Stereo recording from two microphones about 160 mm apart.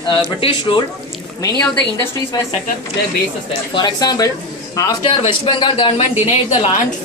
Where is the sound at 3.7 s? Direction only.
25° left (ahead or behind).